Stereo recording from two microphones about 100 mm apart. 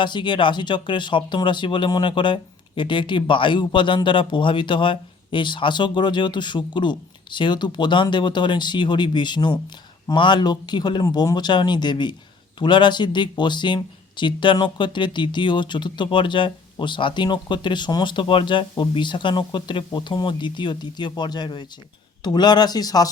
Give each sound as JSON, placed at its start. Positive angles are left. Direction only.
{"t": 0.0, "sound": "speech", "side_deg": 50}